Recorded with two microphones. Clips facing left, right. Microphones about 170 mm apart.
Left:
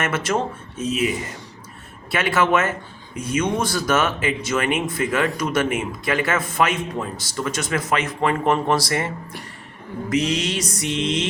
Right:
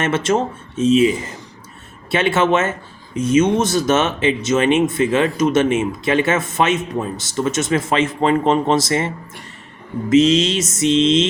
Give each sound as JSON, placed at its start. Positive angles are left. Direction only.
{"t": 0.0, "sound": "speech", "side_deg": -25}